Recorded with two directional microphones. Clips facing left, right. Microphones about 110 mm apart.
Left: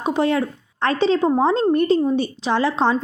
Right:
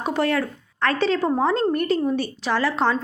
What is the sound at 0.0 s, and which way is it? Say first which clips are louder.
A woman's voice: left 3 dB; 20° left (ahead or behind).